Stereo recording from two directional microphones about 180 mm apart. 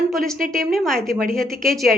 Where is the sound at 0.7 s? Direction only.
Centre (ahead or behind).